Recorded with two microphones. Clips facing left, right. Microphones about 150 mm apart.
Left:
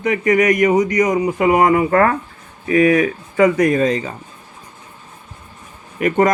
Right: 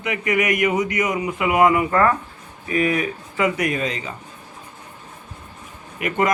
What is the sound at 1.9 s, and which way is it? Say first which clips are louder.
Speech: left 3 dB; 55° left (ahead or behind).